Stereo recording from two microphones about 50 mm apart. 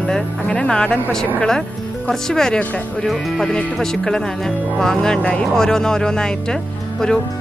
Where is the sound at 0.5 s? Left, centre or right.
Centre.